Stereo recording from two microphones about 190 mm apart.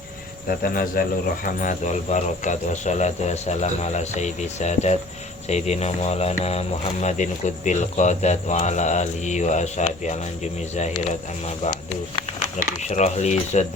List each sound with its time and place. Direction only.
0.4 s speech: 50° left (ahead or behind)